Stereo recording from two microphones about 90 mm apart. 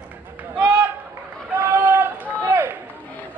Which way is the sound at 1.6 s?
25° right (ahead or behind).